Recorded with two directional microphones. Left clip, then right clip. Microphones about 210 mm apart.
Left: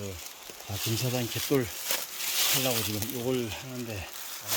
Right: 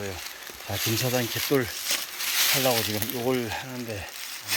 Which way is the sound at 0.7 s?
15° right (ahead or behind).